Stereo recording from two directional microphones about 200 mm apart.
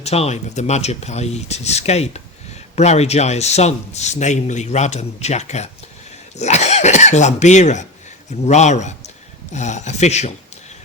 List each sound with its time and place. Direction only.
0.0 s a man's voice: 30° left (ahead or behind)